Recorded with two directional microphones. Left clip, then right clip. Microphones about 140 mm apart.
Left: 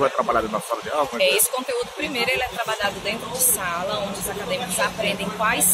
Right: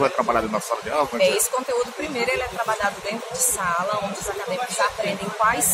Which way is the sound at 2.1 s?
10° right (ahead or behind).